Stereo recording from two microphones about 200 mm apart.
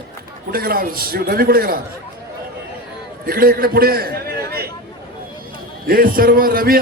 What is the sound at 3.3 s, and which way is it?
Speech, 50° right (ahead or behind).